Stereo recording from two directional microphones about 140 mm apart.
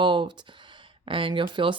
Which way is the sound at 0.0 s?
35° right (ahead or behind).